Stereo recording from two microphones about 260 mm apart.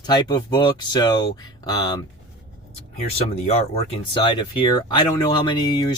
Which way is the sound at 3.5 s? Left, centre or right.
Left.